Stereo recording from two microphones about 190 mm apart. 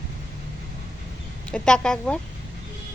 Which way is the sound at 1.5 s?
5° left (ahead or behind).